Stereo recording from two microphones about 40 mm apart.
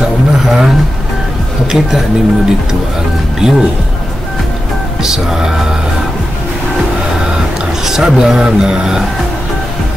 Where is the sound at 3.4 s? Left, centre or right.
Centre.